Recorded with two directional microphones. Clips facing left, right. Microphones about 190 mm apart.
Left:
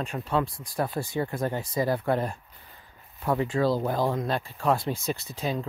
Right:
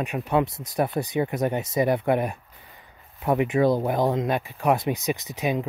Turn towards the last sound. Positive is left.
turn(degrees=-15)  # may be behind; listen again after turning